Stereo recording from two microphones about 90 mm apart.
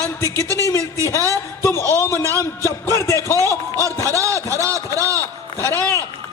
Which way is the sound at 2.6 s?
30° left (ahead or behind).